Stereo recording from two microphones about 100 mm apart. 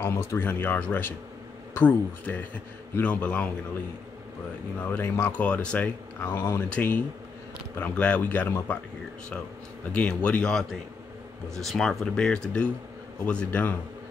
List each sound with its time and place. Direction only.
0.0 s a man's voice: 25° left (ahead or behind)
4.9 s speech: 20° left (ahead or behind)
5.4 s a man's voice: 10° left (ahead or behind)
6.3 s speech: 30° left (ahead or behind)
6.7 s a man's voice: 15° left (ahead or behind)
9.9 s a man's voice: 10° left (ahead or behind)